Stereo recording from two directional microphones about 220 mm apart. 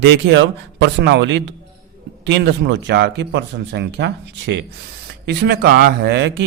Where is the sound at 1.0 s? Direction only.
50° right (ahead or behind).